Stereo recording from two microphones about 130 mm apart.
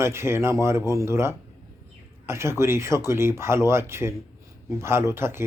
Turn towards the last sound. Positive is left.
turn(degrees=-20)  # may be behind; listen again after turning